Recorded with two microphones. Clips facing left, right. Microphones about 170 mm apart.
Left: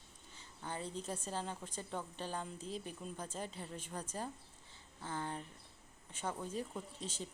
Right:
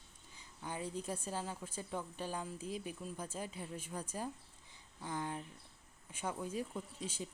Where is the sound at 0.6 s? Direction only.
10° right (ahead or behind).